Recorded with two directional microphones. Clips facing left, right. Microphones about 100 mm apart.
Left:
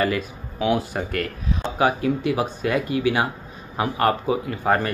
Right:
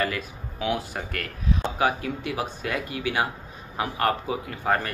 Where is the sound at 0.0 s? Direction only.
15° left (ahead or behind).